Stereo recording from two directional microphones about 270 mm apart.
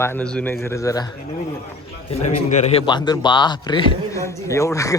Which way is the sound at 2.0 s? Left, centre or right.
Left.